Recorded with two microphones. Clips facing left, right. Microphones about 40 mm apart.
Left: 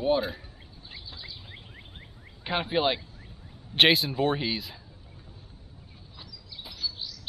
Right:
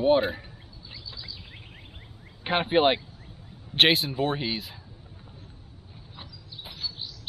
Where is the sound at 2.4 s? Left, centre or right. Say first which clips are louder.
Right 4 dB; right.